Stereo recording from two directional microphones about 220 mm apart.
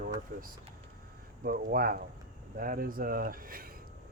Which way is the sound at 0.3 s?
40° right (ahead or behind).